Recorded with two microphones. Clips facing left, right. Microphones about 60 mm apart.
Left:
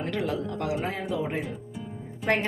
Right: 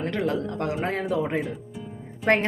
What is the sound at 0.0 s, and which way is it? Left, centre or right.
Speech, right.